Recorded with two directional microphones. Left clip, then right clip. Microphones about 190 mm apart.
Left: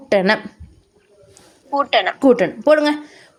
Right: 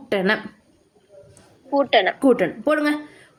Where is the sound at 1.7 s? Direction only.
Centre (ahead or behind).